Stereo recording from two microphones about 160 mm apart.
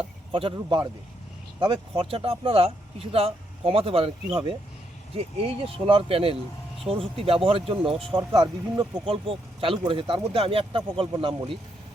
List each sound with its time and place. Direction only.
0.3 s speech: 30° right (ahead or behind)